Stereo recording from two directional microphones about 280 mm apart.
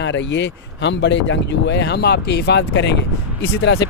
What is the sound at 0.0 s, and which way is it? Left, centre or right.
Speech, left.